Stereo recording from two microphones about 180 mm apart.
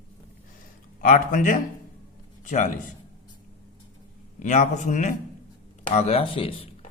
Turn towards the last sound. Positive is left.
turn(degrees=30)  # may be behind; listen again after turning